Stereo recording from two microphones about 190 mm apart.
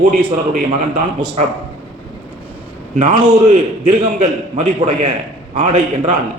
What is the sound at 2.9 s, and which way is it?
A man's voice, 40° right (ahead or behind).